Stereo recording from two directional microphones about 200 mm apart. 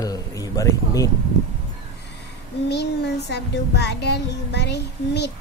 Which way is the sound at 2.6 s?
55° left (ahead or behind).